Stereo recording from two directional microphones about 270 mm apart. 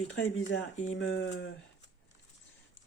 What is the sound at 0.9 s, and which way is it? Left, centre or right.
Speech, left.